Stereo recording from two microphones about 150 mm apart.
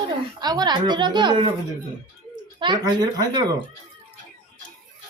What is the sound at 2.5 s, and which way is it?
A woman's voice, 30° right (ahead or behind).